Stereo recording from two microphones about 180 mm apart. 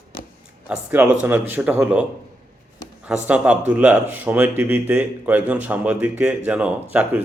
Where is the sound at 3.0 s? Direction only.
10° right (ahead or behind).